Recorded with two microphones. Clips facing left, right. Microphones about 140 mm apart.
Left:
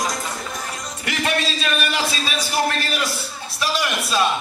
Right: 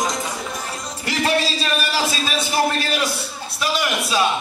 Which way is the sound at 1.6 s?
30° right (ahead or behind).